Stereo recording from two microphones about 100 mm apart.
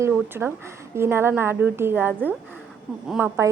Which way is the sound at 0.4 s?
20° right (ahead or behind).